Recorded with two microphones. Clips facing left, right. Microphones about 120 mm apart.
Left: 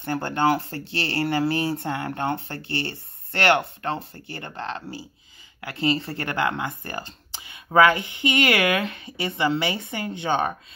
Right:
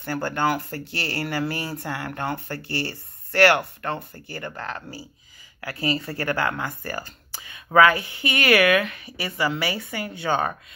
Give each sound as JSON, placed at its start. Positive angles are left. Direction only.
{"t": 0.0, "sound": "speech", "side_deg": 25}